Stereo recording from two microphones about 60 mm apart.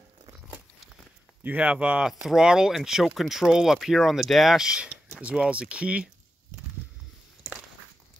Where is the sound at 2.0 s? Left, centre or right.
Centre.